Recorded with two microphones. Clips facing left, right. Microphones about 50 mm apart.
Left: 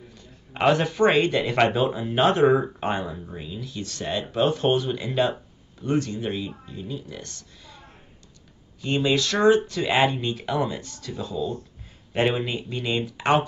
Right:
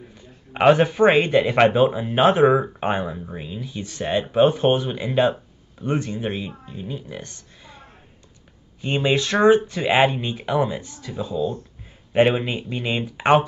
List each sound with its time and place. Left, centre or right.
0.1 s speech: right
8.8 s speech: right